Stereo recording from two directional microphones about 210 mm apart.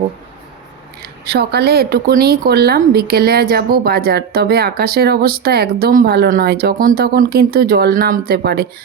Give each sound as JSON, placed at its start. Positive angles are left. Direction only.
{"t": 1.2, "sound": "a woman's voice", "side_deg": -50}